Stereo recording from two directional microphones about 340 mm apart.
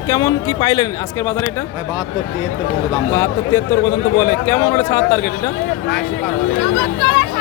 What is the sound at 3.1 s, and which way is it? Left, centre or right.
Speech, centre.